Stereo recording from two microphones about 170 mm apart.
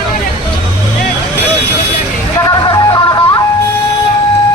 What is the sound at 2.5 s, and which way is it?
Music, 25° left (ahead or behind).